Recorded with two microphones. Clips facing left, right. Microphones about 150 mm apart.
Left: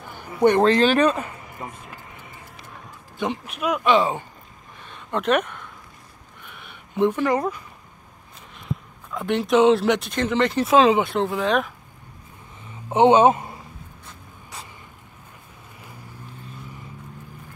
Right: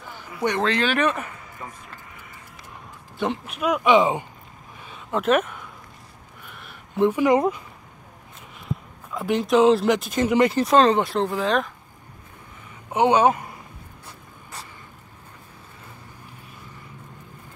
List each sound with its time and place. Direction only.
0.5 s speech: 45° left (ahead or behind)
1.1 s speech: 20° left (ahead or behind)
3.2 s speech: centre (ahead or behind)
3.8 s speech: 20° right (ahead or behind)
4.8 s a sound: 5° right (ahead or behind)
7.2 s speech: 20° right (ahead or behind)
9.1 s speech: centre (ahead or behind)
12.9 s speech: 25° left (ahead or behind)